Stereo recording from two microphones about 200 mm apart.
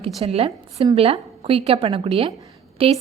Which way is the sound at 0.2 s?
30° right (ahead or behind).